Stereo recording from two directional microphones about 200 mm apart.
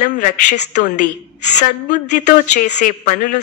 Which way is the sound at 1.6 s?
40° left (ahead or behind).